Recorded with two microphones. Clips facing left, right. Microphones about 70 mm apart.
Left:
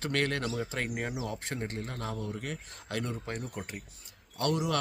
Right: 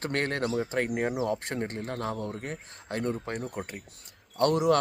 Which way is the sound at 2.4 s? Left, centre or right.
Right.